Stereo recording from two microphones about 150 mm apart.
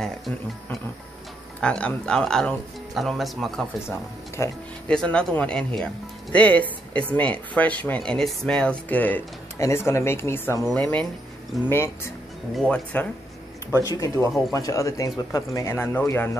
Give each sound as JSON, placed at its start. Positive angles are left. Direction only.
{"t": 0.0, "sound": "speech", "side_deg": 5}
{"t": 4.4, "sound": "speech", "side_deg": 20}
{"t": 4.8, "sound": "speech", "side_deg": 5}
{"t": 13.8, "sound": "speech", "side_deg": 20}